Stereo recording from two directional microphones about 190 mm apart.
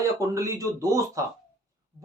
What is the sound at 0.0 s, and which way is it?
Speech, 15° right (ahead or behind).